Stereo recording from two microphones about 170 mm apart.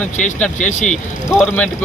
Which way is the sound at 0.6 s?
45° left (ahead or behind).